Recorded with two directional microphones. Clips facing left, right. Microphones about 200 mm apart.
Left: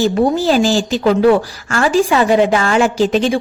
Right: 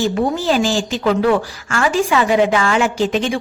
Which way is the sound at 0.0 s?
35° left (ahead or behind).